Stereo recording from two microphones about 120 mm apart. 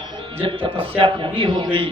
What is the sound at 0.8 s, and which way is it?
A man's voice, 45° right (ahead or behind).